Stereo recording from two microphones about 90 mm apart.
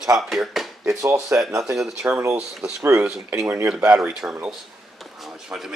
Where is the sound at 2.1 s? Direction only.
30° right (ahead or behind).